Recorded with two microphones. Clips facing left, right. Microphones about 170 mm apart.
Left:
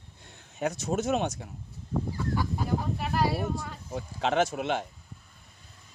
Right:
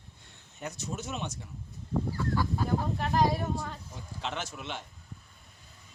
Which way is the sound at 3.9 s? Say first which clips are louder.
Left 14 dB; 80° left.